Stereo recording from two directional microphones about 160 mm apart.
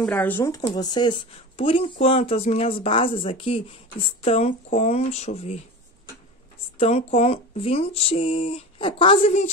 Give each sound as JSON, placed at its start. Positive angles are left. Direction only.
{"t": 0.0, "sound": "speech", "side_deg": 10}
{"t": 6.8, "sound": "speech", "side_deg": 40}